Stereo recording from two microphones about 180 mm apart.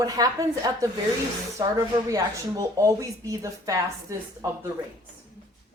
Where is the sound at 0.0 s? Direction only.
20° right (ahead or behind).